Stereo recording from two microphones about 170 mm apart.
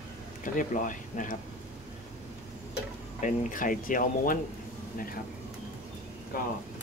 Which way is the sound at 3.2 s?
50° left (ahead or behind).